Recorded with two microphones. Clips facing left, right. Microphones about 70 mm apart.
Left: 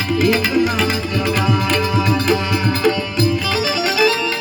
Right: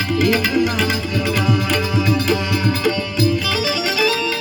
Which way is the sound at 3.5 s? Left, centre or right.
Left.